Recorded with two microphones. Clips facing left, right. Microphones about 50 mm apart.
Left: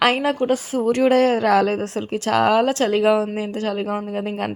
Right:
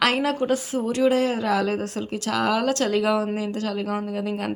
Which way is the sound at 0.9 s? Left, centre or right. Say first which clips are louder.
Left 5 dB; left.